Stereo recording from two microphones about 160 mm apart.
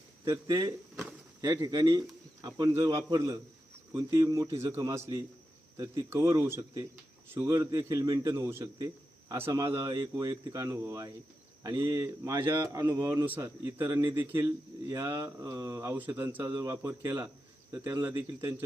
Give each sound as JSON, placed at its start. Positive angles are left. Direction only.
{"t": 0.3, "sound": "a man's voice", "side_deg": -25}
{"t": 16.6, "sound": "a man's voice", "side_deg": -20}